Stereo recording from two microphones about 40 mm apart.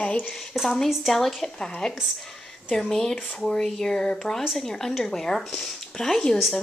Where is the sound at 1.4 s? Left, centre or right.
Centre.